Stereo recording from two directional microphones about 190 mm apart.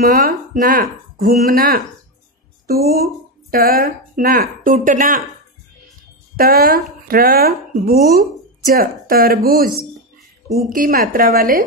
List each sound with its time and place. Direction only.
0.0 s speech: 50° right (ahead or behind)
2.9 s speech: 55° right (ahead or behind)
6.3 s speech: 50° right (ahead or behind)
10.7 s speech: 45° right (ahead or behind)